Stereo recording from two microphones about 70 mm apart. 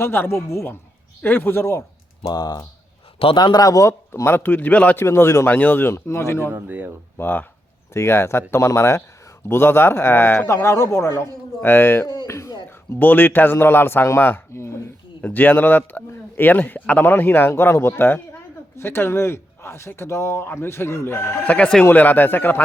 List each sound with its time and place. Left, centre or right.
0.0 s a man's voice: left
2.2 s speech: left
4.1 s speech: left
4.9 s a man's voice: left
5.5 s a man's voice: left
6.5 s speech: right
7.2 s a man's voice: left
12.0 s speech: left
13.0 s a man's voice: left
15.2 s a man's voice: left
21.4 s speech: centre